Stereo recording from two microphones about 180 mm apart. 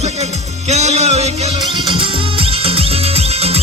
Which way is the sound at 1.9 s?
30° right (ahead or behind).